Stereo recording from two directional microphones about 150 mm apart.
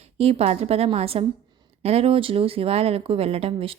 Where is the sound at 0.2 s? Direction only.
45° right (ahead or behind).